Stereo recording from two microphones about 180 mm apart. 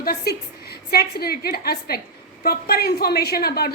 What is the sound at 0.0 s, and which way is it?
A woman's voice, 60° left (ahead or behind).